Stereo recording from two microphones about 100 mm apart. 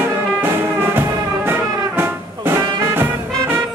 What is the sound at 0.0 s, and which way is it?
Music, 20° right (ahead or behind).